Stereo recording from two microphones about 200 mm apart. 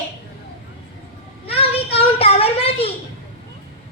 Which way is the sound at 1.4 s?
30° left (ahead or behind).